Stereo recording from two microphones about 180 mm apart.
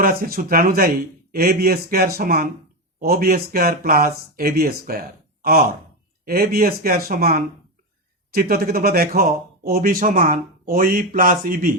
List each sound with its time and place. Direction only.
0.0 s speech: 55° right (ahead or behind)